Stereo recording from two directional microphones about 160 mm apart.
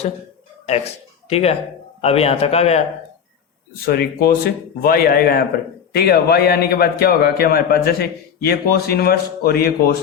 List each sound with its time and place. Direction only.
1.3 s a man's voice: 40° left (ahead or behind)
3.8 s a man's voice: 70° left (ahead or behind)
5.9 s a man's voice: 85° left